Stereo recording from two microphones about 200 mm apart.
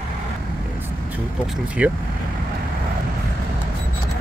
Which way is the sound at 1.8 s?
5° right (ahead or behind).